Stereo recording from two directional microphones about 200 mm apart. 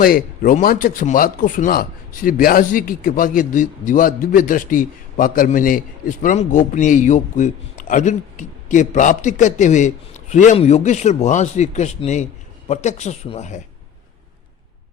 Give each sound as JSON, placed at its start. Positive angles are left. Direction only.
{"t": 0.0, "sound": "speech", "side_deg": 45}